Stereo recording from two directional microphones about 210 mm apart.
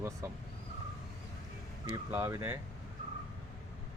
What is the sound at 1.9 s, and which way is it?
Speech, 15° right (ahead or behind).